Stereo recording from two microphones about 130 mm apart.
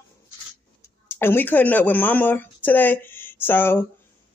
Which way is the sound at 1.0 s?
15° left (ahead or behind).